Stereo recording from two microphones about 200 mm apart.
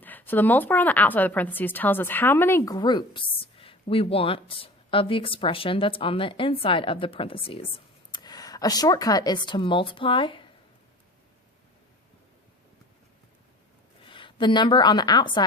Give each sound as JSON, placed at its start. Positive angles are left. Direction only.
{"t": 0.0, "sound": "a woman's voice", "side_deg": 10}
{"t": 14.0, "sound": "a woman's voice", "side_deg": 25}